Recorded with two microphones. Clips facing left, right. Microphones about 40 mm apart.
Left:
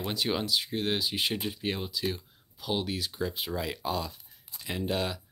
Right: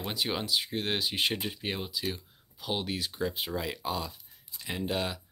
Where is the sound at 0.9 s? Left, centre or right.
Right.